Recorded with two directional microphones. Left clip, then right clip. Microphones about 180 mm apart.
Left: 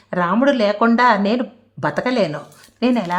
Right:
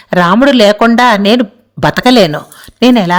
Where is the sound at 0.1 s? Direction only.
35° right (ahead or behind).